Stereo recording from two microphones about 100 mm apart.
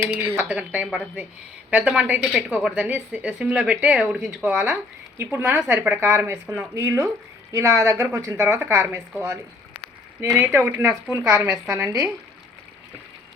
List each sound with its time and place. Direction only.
0.1 s speech: 15° right (ahead or behind)
4.7 s speech: 25° right (ahead or behind)
5.5 s a woman's voice: 30° right (ahead or behind)
10.2 s a woman's voice: 25° right (ahead or behind)